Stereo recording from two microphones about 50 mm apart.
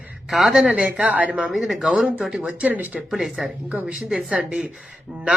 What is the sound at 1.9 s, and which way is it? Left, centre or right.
Speech, right.